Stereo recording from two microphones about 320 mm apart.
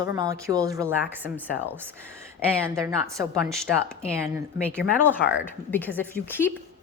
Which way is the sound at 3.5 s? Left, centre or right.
Centre.